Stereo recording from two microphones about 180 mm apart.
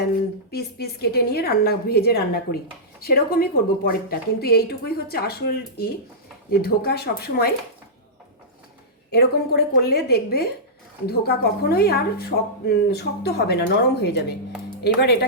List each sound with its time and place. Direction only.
0.5 s speech: 60° left (ahead or behind)
9.1 s speech: 60° left (ahead or behind)